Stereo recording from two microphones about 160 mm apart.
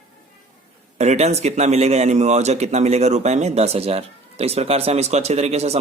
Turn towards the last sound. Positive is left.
turn(degrees=-40)  # may be behind; listen again after turning